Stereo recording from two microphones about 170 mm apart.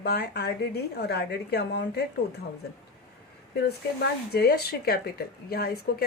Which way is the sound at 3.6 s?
70° left (ahead or behind).